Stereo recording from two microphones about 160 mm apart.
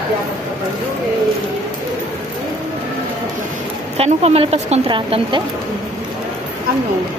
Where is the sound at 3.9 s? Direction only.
40° right (ahead or behind).